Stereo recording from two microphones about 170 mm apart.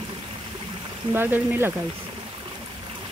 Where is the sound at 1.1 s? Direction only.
10° right (ahead or behind).